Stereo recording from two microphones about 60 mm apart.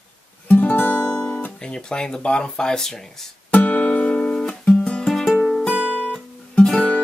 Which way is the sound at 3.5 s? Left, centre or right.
Left.